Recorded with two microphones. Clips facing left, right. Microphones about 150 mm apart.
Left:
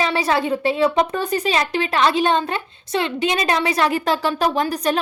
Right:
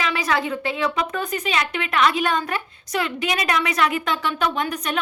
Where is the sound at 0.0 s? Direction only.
30° left (ahead or behind).